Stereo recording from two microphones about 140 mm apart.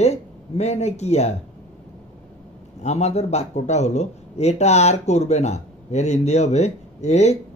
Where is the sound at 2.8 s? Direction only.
50° left (ahead or behind).